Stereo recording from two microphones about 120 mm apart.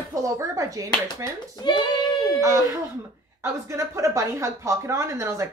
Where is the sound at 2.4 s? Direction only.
25° right (ahead or behind).